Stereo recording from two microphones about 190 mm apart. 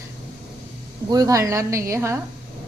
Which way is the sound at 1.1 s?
20° right (ahead or behind).